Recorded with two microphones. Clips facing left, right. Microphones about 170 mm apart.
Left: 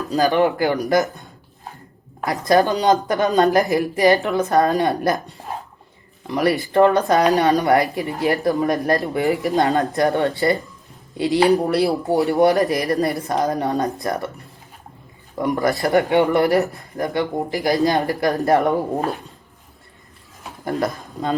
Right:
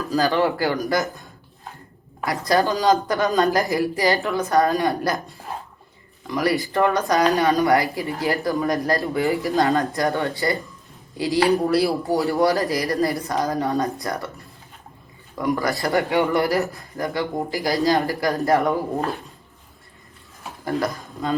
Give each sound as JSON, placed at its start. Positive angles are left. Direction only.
{"t": 0.1, "sound": "speech", "side_deg": 20}
{"t": 2.2, "sound": "speech", "side_deg": 20}
{"t": 6.2, "sound": "speech", "side_deg": 25}
{"t": 15.4, "sound": "speech", "side_deg": 25}
{"t": 20.7, "sound": "speech", "side_deg": 20}